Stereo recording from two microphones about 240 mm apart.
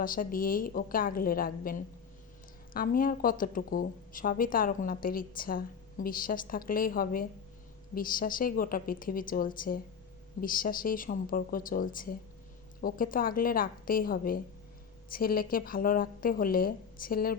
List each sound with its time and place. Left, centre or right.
0.0 s speech: left